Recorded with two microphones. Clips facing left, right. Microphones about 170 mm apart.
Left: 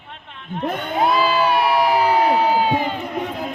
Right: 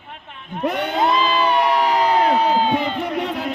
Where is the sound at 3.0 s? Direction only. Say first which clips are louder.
Right 2 dB; 75° right (ahead or behind).